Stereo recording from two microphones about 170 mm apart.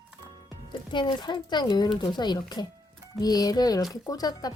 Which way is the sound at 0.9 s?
30° left (ahead or behind).